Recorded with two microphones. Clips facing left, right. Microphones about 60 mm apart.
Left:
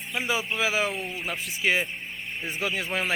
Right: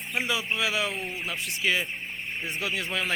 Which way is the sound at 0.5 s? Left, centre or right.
Centre.